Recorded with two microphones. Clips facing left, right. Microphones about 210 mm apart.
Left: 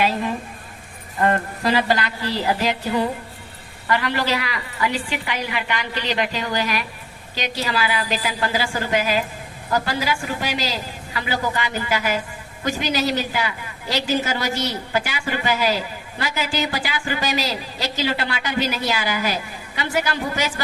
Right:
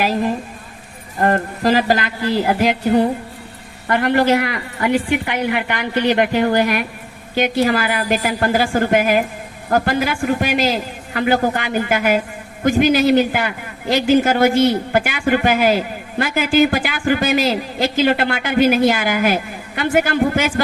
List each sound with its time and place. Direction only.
0.0 s a woman's voice: 40° right (ahead or behind)